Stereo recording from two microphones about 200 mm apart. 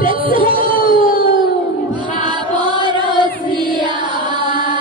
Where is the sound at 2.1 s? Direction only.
25° right (ahead or behind).